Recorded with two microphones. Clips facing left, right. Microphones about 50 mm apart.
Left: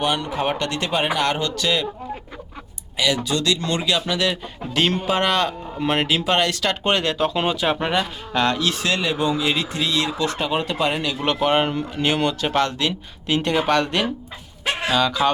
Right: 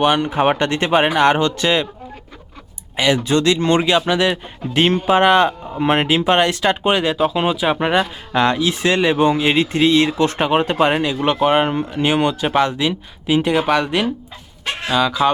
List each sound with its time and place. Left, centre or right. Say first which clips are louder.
0.0 s speech: right 7 dB; right
3.2 s speech: right 7 dB; right
6.8 s speech: right 1 dB; centre
7.8 s speech: right 5 dB; centre
8.9 s speech: right 8 dB; right
11.2 s speech: right 3 dB; centre
14.6 s fowl: left 1 dB; centre
14.9 s speech: right 4 dB; centre